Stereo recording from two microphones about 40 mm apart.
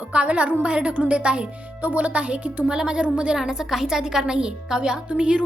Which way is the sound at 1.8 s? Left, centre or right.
Right.